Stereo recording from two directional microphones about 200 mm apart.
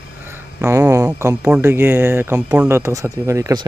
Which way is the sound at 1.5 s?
10° right (ahead or behind).